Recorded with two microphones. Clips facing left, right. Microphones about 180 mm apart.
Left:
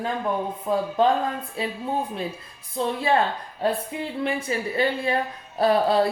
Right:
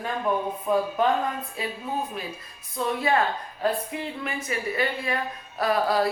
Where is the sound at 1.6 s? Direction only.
30° left (ahead or behind).